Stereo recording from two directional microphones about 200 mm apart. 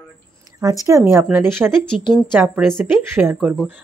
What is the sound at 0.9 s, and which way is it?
Speech, 10° right (ahead or behind).